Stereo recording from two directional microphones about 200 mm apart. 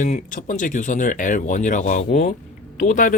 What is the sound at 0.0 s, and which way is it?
Speech, 40° left (ahead or behind).